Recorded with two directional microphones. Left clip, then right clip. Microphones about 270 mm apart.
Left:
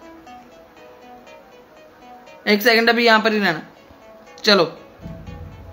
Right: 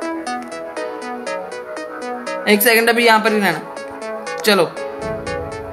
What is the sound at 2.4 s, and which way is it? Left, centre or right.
Speech, centre.